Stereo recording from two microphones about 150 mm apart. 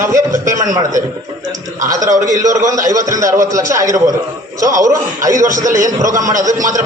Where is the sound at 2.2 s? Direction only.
25° right (ahead or behind).